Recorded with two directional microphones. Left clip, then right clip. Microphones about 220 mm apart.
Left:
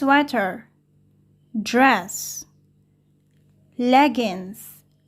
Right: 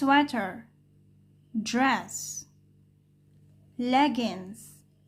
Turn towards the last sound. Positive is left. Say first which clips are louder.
# left 7 dB
turn(degrees=25)  # may be behind; listen again after turning